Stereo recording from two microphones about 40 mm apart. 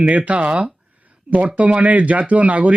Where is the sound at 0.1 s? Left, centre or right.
Right.